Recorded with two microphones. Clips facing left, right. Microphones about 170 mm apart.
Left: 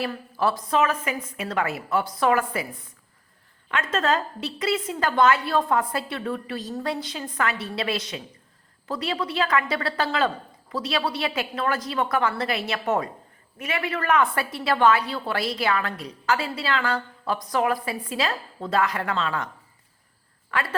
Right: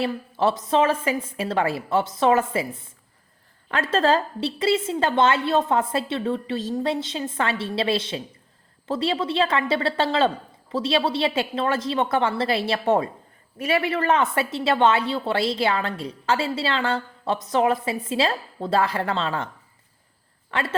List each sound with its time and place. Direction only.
0.0 s a woman's voice: 25° right (ahead or behind)
3.7 s a woman's voice: 35° right (ahead or behind)
20.5 s a woman's voice: 25° right (ahead or behind)